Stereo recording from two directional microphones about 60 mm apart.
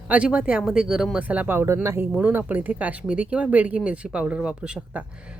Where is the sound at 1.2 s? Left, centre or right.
Right.